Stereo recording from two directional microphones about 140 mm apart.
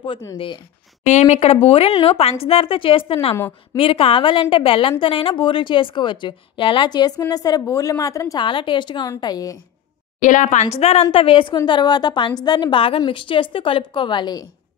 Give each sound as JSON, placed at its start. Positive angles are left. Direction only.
{"t": 1.0, "sound": "a woman's voice", "side_deg": 55}
{"t": 8.4, "sound": "a woman's voice", "side_deg": 35}
{"t": 10.2, "sound": "a woman's voice", "side_deg": 65}